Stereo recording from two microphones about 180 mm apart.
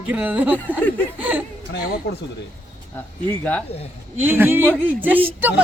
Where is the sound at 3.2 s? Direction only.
10° left (ahead or behind).